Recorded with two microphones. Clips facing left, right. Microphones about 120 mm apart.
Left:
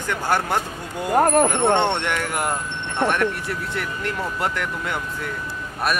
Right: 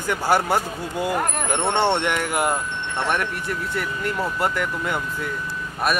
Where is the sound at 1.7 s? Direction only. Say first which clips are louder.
Right 1 dB; 5° right (ahead or behind).